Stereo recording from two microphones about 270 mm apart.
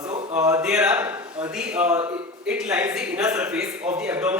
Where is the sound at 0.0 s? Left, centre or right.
Centre.